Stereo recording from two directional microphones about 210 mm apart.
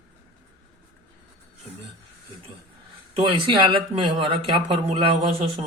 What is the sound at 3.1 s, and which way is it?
Speech, 25° right (ahead or behind).